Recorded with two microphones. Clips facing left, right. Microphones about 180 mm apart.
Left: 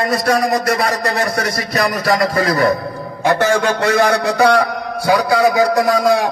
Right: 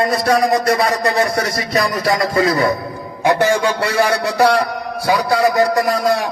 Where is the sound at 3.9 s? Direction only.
5° right (ahead or behind).